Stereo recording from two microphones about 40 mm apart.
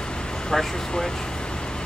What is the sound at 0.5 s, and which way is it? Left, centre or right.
Speech, centre.